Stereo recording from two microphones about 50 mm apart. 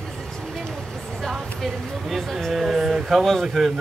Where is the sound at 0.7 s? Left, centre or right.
Centre.